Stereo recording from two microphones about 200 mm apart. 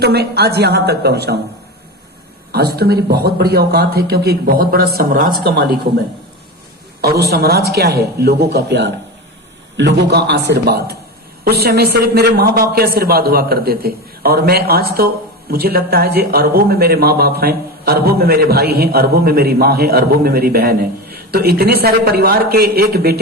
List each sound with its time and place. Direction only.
0.0 s a man's voice: 55° right (ahead or behind)
2.5 s a man's voice: 50° right (ahead or behind)
7.0 s a man's voice: 50° right (ahead or behind)